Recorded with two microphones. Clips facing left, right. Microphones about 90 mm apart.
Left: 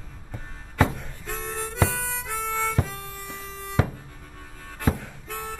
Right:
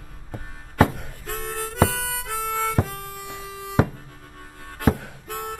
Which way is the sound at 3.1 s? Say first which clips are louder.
Right 2 dB; 10° right (ahead or behind).